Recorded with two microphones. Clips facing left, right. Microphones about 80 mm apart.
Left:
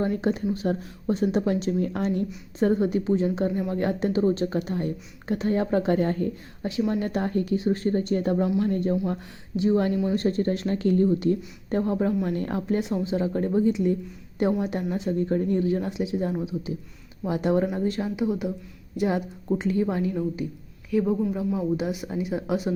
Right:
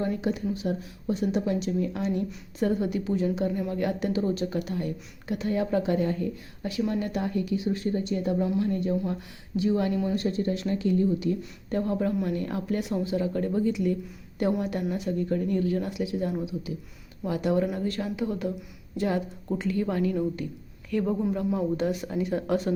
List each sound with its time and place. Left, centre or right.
0.0 s speech: left
6.6 s speech: left
11.8 s a woman's voice: left
12.2 s a woman's voice: left
20.9 s speech: centre